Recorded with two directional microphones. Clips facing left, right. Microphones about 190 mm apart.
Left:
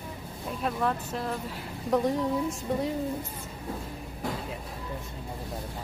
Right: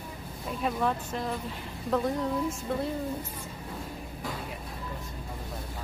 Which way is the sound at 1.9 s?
15° left (ahead or behind).